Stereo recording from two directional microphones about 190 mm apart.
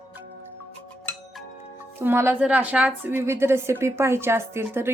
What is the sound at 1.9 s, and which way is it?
A woman's voice, 10° right (ahead or behind).